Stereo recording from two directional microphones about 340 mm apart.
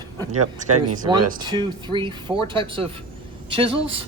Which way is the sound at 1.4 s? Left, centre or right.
Centre.